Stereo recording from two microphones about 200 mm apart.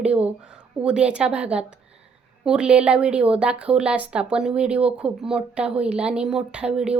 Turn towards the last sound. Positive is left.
turn(degrees=-5)  # may be behind; listen again after turning